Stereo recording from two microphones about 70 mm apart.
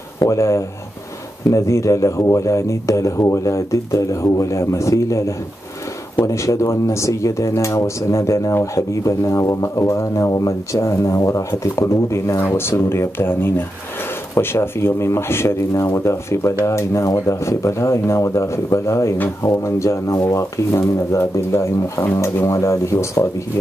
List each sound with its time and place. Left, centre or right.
0.2 s speech: left